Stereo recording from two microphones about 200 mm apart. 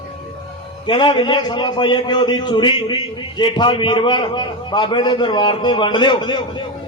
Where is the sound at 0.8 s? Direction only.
25° left (ahead or behind).